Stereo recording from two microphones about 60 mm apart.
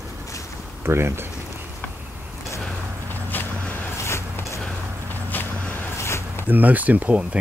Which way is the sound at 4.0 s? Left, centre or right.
Left.